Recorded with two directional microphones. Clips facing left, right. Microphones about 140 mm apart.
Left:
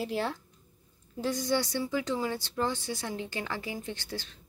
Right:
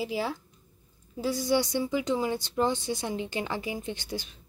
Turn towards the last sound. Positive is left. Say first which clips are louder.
# right 3 dB
turn(degrees=-15)  # may be behind; listen again after turning